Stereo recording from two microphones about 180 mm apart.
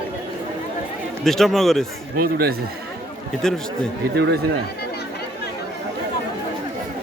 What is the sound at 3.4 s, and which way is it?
Speech, 5° left (ahead or behind).